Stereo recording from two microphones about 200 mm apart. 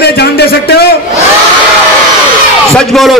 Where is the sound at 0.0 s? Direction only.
55° left (ahead or behind).